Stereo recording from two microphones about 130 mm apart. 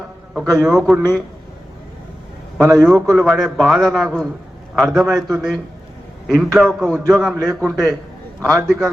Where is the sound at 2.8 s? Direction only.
5° right (ahead or behind).